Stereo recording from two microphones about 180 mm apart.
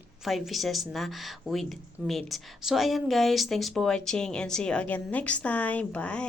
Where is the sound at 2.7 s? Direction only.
Centre (ahead or behind).